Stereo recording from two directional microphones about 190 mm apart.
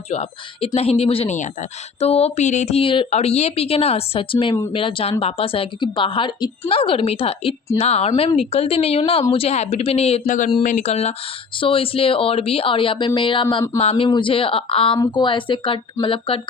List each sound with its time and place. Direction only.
0.1 s speech: 35° left (ahead or behind)